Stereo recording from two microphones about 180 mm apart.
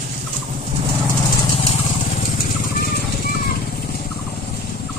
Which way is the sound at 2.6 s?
55° left (ahead or behind).